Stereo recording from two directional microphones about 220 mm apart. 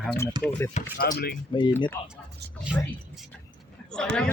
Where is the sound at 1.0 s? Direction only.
45° left (ahead or behind).